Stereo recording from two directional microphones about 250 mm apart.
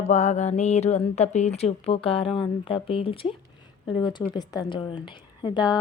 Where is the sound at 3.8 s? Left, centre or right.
Centre.